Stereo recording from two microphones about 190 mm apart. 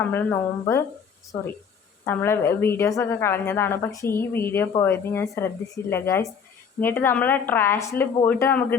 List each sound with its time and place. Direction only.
0.1 s a woman's voice: 10° left (ahead or behind)